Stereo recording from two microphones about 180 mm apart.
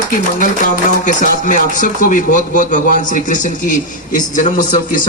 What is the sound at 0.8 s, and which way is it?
A man's voice, 45° left (ahead or behind).